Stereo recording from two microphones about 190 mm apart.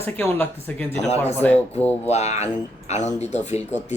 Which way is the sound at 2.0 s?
35° left (ahead or behind).